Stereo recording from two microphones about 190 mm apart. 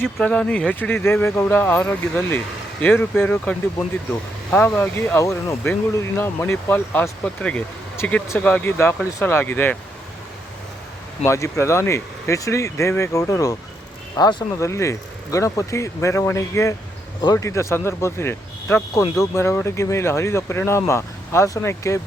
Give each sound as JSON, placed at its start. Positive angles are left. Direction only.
{"t": 0.0, "sound": "speech", "side_deg": 5}
{"t": 11.2, "sound": "speech", "side_deg": 15}